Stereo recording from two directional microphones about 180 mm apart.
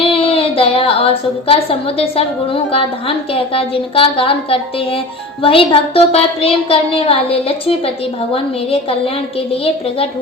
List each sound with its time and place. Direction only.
0.0 s a woman's voice: 30° left (ahead or behind)